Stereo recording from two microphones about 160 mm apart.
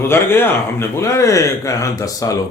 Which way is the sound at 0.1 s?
15° left (ahead or behind).